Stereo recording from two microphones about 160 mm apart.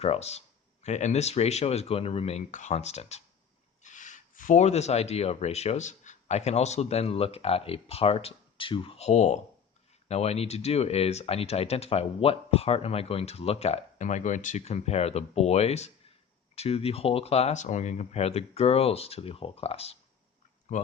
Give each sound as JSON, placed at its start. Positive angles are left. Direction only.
{"t": 0.0, "sound": "speech", "side_deg": 40}
{"t": 20.7, "sound": "speech", "side_deg": 50}